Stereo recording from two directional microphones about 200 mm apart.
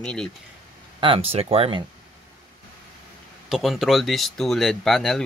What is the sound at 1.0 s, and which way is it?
Speech, 30° right (ahead or behind).